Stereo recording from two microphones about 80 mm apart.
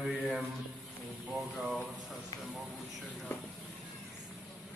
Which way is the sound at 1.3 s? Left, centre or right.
Centre.